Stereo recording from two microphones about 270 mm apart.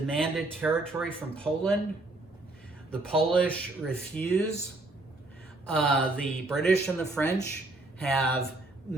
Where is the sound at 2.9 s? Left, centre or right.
Centre.